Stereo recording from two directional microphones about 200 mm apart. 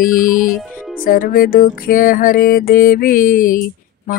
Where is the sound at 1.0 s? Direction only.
45° left (ahead or behind).